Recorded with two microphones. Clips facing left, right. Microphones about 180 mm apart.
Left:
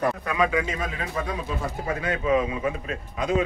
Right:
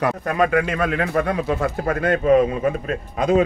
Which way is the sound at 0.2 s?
50° right (ahead or behind).